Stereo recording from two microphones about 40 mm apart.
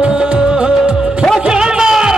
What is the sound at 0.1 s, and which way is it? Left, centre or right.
Music of bollywood, centre.